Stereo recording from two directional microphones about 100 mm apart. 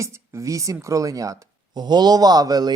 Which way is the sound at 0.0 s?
30° right (ahead or behind).